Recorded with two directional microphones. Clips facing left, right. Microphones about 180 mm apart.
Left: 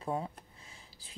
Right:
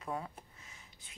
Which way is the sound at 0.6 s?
30° left (ahead or behind).